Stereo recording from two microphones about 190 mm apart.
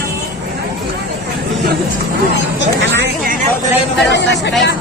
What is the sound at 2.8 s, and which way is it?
Hubbub, 65° right (ahead or behind).